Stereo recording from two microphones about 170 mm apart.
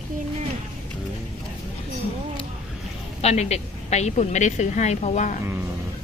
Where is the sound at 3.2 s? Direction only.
40° left (ahead or behind).